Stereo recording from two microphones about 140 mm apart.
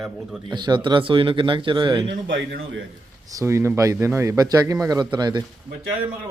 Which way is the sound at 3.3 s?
20° right (ahead or behind).